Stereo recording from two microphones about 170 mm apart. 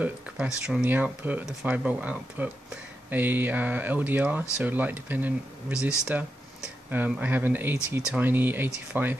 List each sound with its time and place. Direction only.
0.0 s speech: 5° right (ahead or behind)